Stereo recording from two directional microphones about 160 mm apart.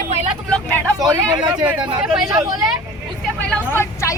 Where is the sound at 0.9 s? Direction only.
25° right (ahead or behind).